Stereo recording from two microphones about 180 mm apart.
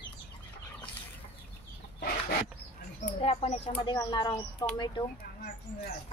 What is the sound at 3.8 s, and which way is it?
Speech, 25° left (ahead or behind).